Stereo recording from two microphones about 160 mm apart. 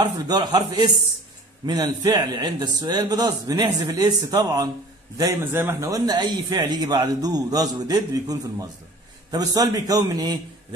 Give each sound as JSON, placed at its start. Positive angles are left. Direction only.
{"t": 0.0, "sound": "a man's voice", "side_deg": -25}